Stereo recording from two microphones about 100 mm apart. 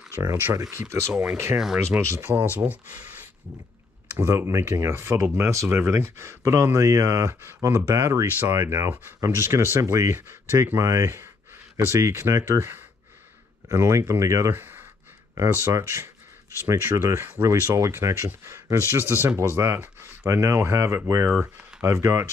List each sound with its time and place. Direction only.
0.1 s speech: 25° right (ahead or behind)
1.1 s speech: 15° right (ahead or behind)
1.9 s speech: 30° right (ahead or behind)
4.2 s speech: 25° right (ahead or behind)